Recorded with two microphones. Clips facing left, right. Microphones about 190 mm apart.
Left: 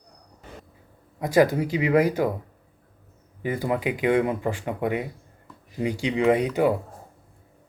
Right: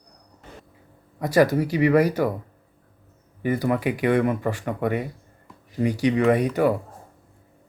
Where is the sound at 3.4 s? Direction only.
15° left (ahead or behind).